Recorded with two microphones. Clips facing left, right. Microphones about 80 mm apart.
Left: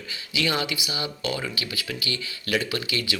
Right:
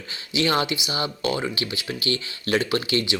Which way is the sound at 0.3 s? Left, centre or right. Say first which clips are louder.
Right 4 dB; right.